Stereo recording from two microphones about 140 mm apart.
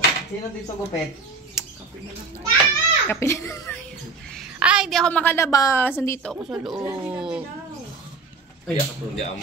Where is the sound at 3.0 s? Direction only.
20° left (ahead or behind).